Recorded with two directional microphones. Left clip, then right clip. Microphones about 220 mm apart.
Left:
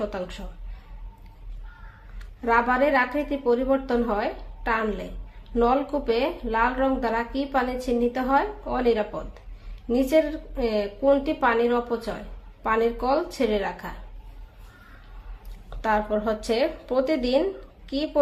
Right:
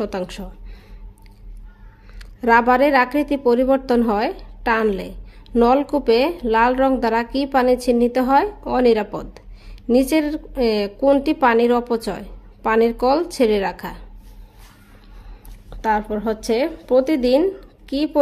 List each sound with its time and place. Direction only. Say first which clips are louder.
0.0 s speech: right 5 dB; 45° right (ahead or behind)
2.1 s a woman's voice: right 7 dB; 45° right (ahead or behind)
15.8 s a woman's voice: right 3 dB; 35° right (ahead or behind)